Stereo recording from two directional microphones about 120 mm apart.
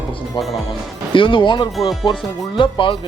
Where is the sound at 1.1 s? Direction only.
45° left (ahead or behind).